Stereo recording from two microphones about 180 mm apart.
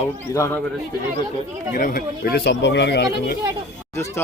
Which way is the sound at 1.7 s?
50° left (ahead or behind).